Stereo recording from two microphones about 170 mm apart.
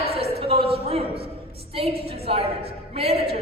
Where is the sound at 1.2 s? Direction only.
35° right (ahead or behind).